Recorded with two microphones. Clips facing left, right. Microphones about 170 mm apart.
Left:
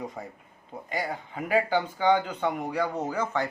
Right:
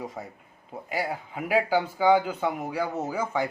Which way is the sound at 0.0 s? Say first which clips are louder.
Even; centre (ahead or behind).